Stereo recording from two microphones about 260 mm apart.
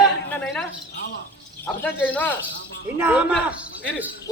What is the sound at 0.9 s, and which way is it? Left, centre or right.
Speech, left.